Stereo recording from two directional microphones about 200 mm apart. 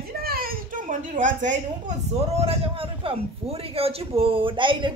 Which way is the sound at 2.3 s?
30° right (ahead or behind).